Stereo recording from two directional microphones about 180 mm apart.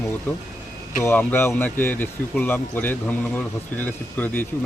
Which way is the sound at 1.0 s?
10° left (ahead or behind).